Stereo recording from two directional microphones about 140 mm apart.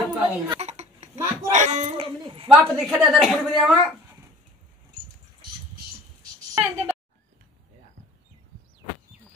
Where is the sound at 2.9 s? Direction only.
Centre (ahead or behind).